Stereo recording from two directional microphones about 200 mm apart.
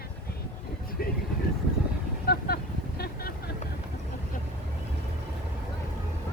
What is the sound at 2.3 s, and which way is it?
Vehicle, 50° left (ahead or behind).